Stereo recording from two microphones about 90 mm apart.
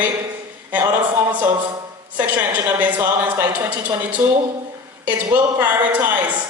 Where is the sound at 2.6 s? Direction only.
20° right (ahead or behind).